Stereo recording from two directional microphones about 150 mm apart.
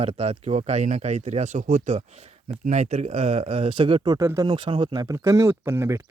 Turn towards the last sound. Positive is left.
turn(degrees=-20)  # may be behind; listen again after turning